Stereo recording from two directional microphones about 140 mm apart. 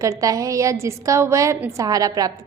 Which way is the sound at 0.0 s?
25° right (ahead or behind).